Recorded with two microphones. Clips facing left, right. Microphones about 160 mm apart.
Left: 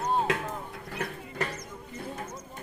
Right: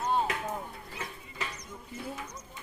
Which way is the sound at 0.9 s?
60° left (ahead or behind).